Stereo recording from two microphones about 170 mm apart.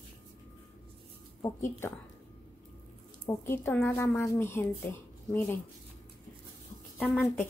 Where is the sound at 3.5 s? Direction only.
10° left (ahead or behind).